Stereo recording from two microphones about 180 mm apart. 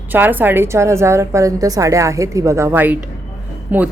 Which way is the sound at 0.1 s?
10° right (ahead or behind).